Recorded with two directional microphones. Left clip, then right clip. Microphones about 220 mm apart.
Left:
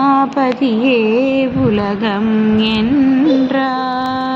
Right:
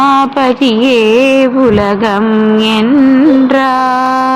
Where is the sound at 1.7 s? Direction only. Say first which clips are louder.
Right 7 dB; 20° right (ahead or behind).